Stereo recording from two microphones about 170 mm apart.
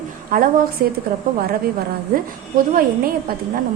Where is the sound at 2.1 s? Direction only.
55° right (ahead or behind).